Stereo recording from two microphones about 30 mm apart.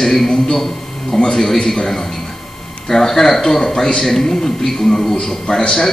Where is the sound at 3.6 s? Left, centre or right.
Left.